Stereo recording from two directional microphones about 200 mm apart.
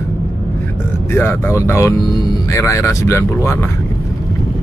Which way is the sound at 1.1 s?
10° left (ahead or behind).